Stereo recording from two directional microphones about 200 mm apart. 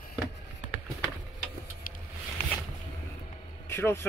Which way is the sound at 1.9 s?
45° left (ahead or behind).